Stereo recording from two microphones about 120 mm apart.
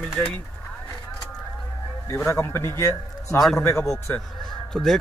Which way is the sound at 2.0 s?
20° left (ahead or behind).